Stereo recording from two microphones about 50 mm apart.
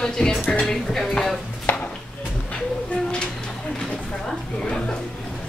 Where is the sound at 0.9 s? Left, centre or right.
Centre.